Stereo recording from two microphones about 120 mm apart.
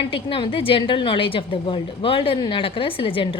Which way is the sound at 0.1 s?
50° left (ahead or behind).